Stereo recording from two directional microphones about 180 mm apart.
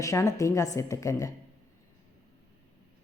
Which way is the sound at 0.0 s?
15° left (ahead or behind).